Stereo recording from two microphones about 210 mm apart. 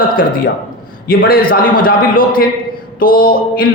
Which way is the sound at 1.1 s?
45° left (ahead or behind).